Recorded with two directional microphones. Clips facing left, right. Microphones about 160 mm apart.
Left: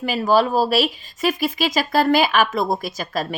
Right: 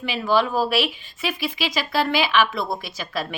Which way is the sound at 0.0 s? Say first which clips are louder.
Left 4 dB; 40° left (ahead or behind).